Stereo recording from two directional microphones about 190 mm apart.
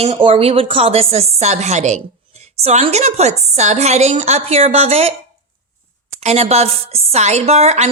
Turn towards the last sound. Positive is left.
turn(degrees=-35)  # may be behind; listen again after turning